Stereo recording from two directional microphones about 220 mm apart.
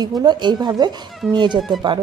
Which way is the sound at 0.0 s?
20° right (ahead or behind).